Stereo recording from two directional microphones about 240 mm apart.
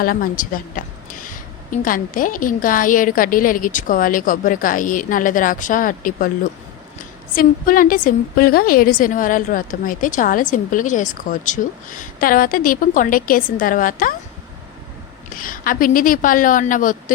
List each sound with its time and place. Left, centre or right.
0.0 s a woman's voice: left
7.3 s a woman's voice: left
15.4 s a woman's voice: left